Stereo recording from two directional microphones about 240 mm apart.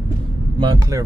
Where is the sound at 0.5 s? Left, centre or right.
Centre.